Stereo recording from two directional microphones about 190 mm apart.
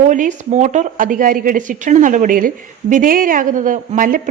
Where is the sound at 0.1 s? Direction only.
40° right (ahead or behind).